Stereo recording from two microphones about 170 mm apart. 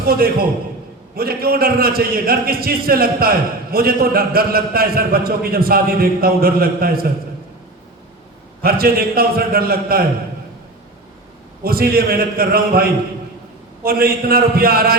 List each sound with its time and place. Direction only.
0.0 s a man's voice: 60° right (ahead or behind)
8.6 s a man's voice: 60° right (ahead or behind)
11.6 s a man's voice: 60° right (ahead or behind)